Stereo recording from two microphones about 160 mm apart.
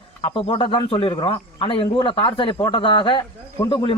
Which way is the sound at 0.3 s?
35° left (ahead or behind).